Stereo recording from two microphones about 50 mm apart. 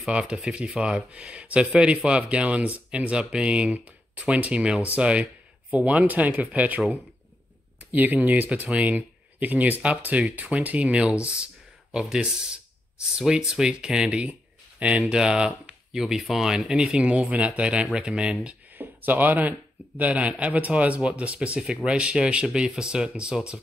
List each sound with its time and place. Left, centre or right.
0.1 s speech: centre; by 6.8 s right
7.9 s speech: right
9.8 s speech: right
11.2 s a sound: right
12.2 s speech: centre
18.8 s speech: right
20.0 s speech: right